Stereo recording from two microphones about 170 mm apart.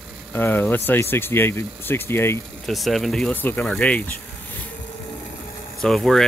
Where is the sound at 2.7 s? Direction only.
Centre (ahead or behind).